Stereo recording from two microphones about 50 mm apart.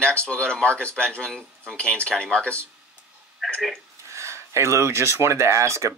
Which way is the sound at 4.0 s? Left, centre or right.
Right.